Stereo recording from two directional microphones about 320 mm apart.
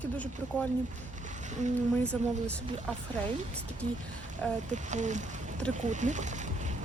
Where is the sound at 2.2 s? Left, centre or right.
Right.